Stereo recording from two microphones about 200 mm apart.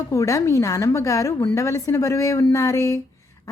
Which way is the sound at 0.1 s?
15° left (ahead or behind).